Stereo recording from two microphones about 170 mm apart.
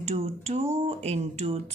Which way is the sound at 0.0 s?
40° right (ahead or behind).